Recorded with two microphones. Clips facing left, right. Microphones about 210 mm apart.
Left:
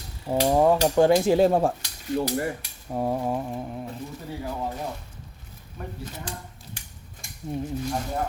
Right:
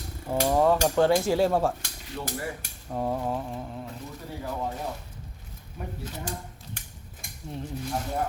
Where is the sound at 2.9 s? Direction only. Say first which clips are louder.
Left 3 dB; 10° left (ahead or behind).